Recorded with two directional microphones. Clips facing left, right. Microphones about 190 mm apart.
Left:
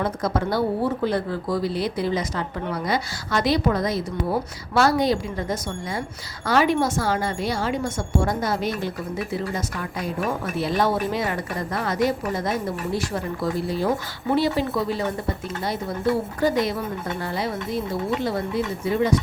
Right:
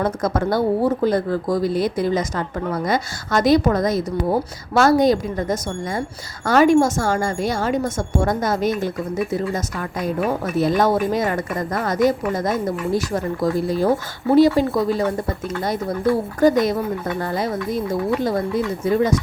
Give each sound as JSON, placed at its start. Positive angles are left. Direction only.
{"t": 0.0, "sound": "speech", "side_deg": -45}
{"t": 16.4, "sound": "speech", "side_deg": -45}